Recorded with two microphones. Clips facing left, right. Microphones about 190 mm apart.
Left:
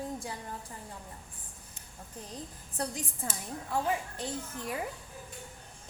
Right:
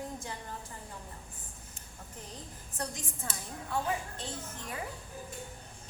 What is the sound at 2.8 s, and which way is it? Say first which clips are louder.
Speech: left 4 dB; 35° left (ahead or behind).